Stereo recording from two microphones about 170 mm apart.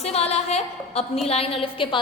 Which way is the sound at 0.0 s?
40° left (ahead or behind).